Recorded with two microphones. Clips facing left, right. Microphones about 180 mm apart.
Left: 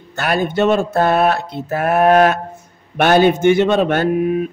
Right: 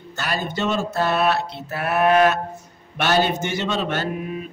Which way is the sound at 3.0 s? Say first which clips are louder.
Left 8 dB; 55° left (ahead or behind).